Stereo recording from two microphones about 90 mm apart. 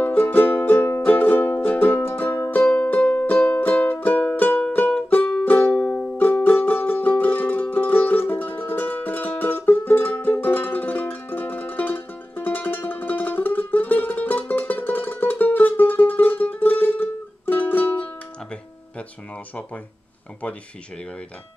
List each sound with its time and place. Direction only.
0.0 s music: 20° left (ahead or behind)
20.4 s speech: 15° left (ahead or behind)